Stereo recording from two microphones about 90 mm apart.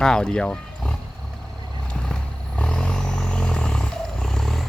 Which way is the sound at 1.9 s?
10° left (ahead or behind).